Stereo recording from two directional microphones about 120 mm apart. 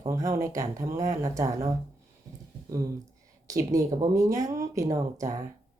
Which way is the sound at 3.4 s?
30° right (ahead or behind).